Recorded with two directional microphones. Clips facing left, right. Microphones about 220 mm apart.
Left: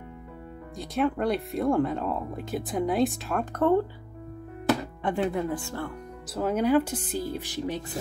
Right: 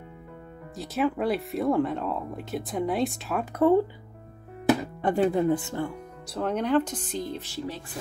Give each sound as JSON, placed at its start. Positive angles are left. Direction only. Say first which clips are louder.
{"t": 0.7, "sound": "speech", "louder": "even", "side_deg": 0}
{"t": 5.0, "sound": "speech", "louder": "right 4 dB", "side_deg": -40}
{"t": 5.5, "sound": "speech", "louder": "right 5 dB", "side_deg": -20}
{"t": 6.3, "sound": "speech", "louder": "left 1 dB", "side_deg": 5}